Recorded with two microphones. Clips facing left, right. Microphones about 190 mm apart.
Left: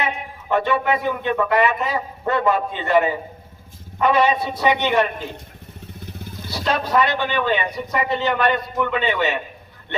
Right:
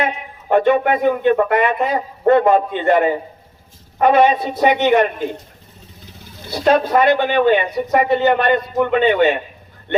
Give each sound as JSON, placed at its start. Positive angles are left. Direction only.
{"t": 0.0, "sound": "a man's voice", "side_deg": -50}
{"t": 6.0, "sound": "motorcycle", "side_deg": 55}
{"t": 6.5, "sound": "a man's voice", "side_deg": -50}